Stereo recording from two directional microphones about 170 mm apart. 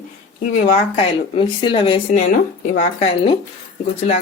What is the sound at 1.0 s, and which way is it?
Speech, 30° left (ahead or behind).